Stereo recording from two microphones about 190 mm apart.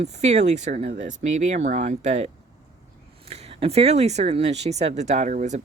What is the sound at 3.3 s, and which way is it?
Speech, 35° right (ahead or behind).